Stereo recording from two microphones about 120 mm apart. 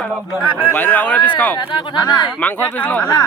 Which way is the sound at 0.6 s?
15° left (ahead or behind).